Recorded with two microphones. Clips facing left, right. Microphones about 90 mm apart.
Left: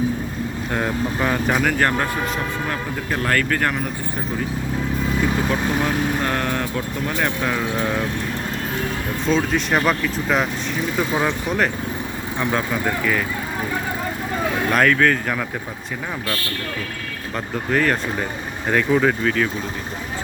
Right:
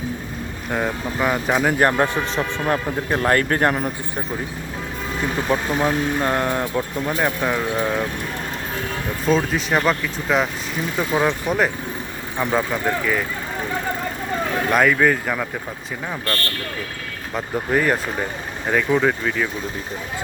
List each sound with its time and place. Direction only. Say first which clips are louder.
0.7 s speech: even; 5° right (ahead or behind)
1.6 s speech: right 2 dB; 20° right (ahead or behind)
5.5 s speech: right 1 dB; 25° right (ahead or behind); by 8.0 s 5° right (ahead or behind)
9.2 s speech: right 1 dB; 5° right (ahead or behind)
14.7 s speech: right 1 dB; 5° right (ahead or behind)
17.3 s speech: right 1 dB; 10° right (ahead or behind)